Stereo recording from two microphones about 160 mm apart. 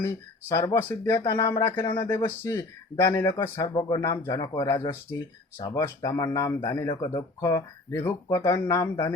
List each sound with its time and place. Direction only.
0.0 s a man's voice: 15° left (ahead or behind)